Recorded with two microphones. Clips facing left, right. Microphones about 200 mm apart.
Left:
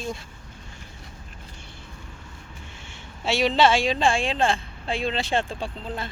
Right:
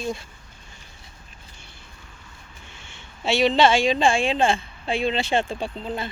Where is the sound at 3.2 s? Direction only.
5° left (ahead or behind).